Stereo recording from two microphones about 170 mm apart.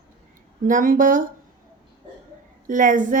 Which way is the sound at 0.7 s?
50° right (ahead or behind).